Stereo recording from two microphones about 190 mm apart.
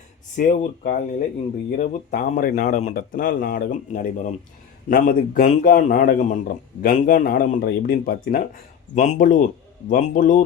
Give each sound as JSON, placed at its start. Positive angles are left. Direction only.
{"t": 0.3, "sound": "speech", "side_deg": 40}